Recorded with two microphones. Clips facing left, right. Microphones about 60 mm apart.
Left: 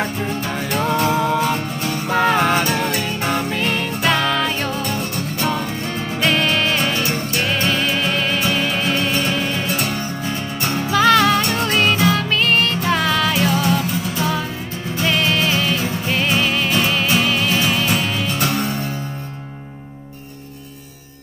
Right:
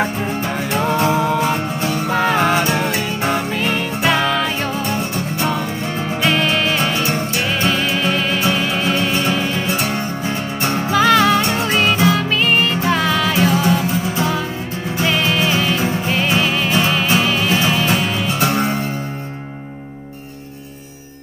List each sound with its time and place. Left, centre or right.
0.0 s music: centre
2.0 s music: centre
2.6 s music: centre
4.8 s music: right
6.2 s music: centre
7.6 s music: centre
9.8 s music: right
10.9 s music: centre
15.0 s music: centre
18.4 s music: right